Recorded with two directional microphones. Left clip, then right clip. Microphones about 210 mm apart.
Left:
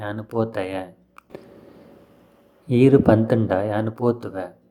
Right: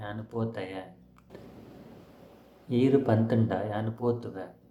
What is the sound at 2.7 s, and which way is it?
Speech, 35° left (ahead or behind).